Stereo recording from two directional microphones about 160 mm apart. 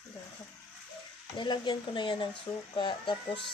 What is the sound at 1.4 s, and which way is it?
Speech, 30° left (ahead or behind).